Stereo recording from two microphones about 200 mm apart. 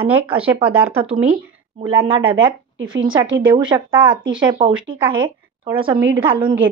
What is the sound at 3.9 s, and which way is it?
Speech, 5° right (ahead or behind).